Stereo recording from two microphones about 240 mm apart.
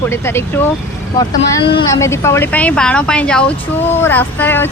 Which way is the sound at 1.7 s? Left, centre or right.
Centre.